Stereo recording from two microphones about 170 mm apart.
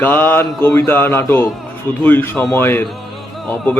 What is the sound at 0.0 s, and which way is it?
A man's voice, 10° left (ahead or behind).